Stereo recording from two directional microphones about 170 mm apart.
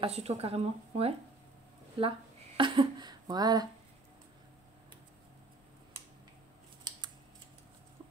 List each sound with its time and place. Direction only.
0.0 s speech: 40° right (ahead or behind); by 3.6 s 25° right (ahead or behind)